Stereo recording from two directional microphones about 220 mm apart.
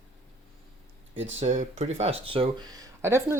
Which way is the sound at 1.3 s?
35° right (ahead or behind).